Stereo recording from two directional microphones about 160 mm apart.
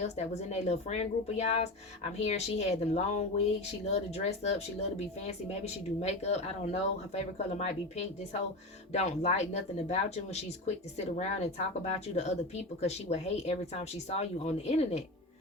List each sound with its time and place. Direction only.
0.0 s speech: 45° left (ahead or behind)